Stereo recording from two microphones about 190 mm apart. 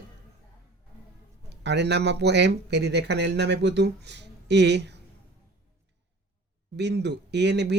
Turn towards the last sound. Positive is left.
turn(degrees=-65)  # may be behind; listen again after turning